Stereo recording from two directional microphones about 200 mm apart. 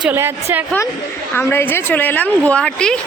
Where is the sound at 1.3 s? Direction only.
10° left (ahead or behind).